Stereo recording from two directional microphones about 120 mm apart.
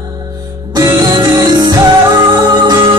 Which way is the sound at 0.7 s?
30° right (ahead or behind).